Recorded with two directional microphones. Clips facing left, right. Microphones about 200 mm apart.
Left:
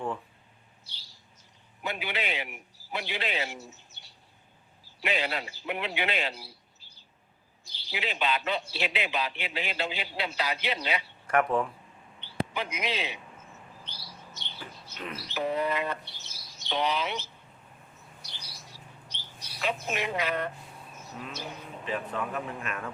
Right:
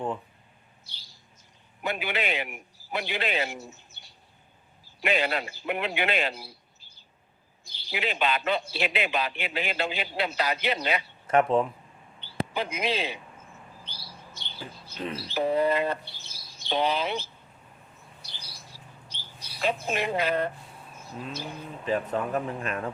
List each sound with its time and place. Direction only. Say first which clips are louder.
1.8 s a man's voice: right 4 dB; 55° right (ahead or behind)
11.3 s speech: right 4 dB; 25° right (ahead or behind)
13.8 s bird: right 1 dB; 10° right (ahead or behind)
14.3 s speech: right 4 dB; 30° right (ahead or behind)
16.1 s bird: right 1 dB; 30° right (ahead or behind)
19.0 s bird: right 1 dB; 30° right (ahead or behind)
21.0 s speech: right 3 dB; 30° right (ahead or behind)